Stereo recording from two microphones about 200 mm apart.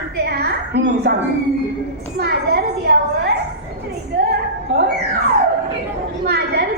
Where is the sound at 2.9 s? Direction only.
55° right (ahead or behind).